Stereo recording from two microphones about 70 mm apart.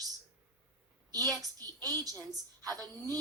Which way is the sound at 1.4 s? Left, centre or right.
Right.